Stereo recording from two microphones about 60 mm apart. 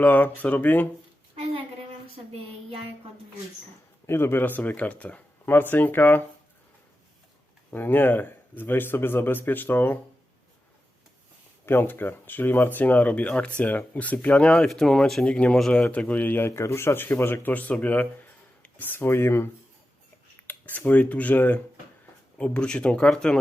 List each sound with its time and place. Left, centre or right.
0.0 s speech: left
4.0 s speech: left
5.5 s a man's voice: left
7.7 s a man's voice: left
11.6 s speech: left; by 15.4 s centre
15.7 s speech: left
16.6 s a man's voice: left
17.5 s speech: left
18.6 s a sound: left
18.9 s speech: left
20.5 s speech: left; by 23.4 s centre